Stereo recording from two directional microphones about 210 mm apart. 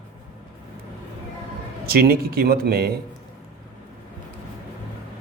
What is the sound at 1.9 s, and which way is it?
A man's voice, 45° right (ahead or behind).